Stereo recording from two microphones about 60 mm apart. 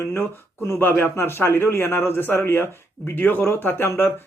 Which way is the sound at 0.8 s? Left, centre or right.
Left.